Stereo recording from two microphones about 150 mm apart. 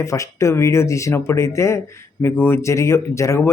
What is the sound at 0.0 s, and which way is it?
A man's voice, 20° left (ahead or behind).